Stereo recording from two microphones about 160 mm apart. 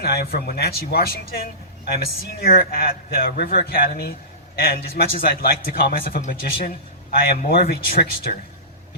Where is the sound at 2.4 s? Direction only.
70° left (ahead or behind).